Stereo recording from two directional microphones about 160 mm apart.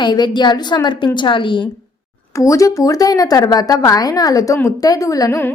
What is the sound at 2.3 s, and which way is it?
A woman's voice, 20° left (ahead or behind).